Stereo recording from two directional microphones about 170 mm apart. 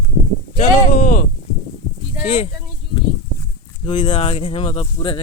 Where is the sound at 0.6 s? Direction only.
55° left (ahead or behind).